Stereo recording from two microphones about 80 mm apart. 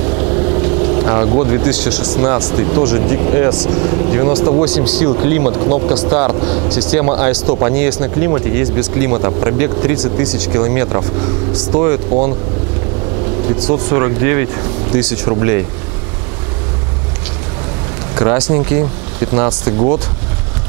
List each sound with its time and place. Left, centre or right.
0.1 s speech: centre
13.6 s speech: centre
18.1 s speech: centre